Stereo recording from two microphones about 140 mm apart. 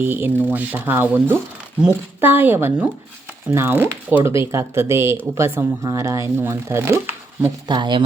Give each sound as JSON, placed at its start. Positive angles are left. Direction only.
{"t": 0.0, "sound": "speech", "side_deg": -15}
{"t": 7.7, "sound": "speech", "side_deg": -35}